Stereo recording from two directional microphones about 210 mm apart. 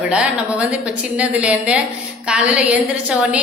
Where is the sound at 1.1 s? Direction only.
5° right (ahead or behind).